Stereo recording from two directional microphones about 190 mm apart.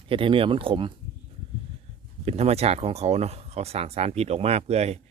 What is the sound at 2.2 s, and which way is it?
Speech, 35° right (ahead or behind).